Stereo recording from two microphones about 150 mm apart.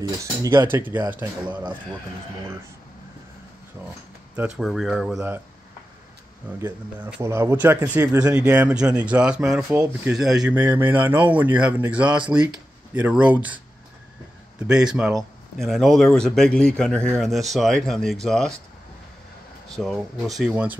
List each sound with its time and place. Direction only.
0.2 s speech: 20° right (ahead or behind)
4.6 s a man's voice: centre (ahead or behind)
6.6 s speech: 10° right (ahead or behind)
14.7 s a man's voice: 5° right (ahead or behind)
19.7 s a man's voice: centre (ahead or behind)